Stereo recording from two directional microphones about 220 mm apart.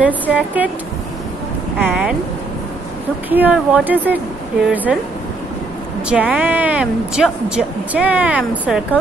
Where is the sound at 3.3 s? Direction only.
5° right (ahead or behind).